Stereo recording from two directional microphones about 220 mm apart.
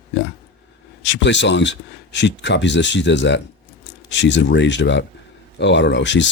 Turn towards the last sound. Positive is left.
turn(degrees=55)  # may be behind; listen again after turning